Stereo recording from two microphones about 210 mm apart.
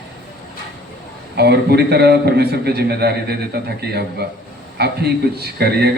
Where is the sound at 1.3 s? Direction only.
50° right (ahead or behind).